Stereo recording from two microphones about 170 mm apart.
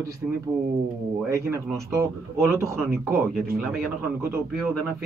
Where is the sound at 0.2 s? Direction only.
5° right (ahead or behind).